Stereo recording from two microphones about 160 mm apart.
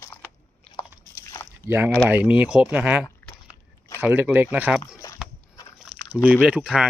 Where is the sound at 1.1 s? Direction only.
20° left (ahead or behind).